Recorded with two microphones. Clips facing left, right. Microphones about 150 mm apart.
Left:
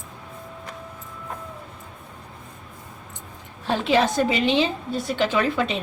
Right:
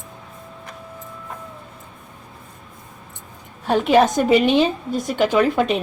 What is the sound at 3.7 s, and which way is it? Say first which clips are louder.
Speech: right 5 dB; 50° right (ahead or behind).